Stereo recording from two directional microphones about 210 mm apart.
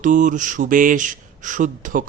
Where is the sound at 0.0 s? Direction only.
35° right (ahead or behind).